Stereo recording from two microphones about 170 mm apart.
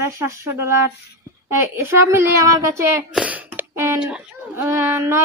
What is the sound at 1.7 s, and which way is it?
A woman's voice, 15° right (ahead or behind).